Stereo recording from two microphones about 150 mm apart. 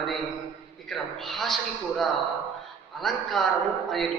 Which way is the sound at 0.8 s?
Centre (ahead or behind).